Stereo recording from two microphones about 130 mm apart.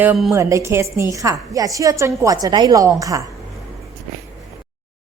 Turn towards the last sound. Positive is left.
turn(degrees=-25)  # may be behind; listen again after turning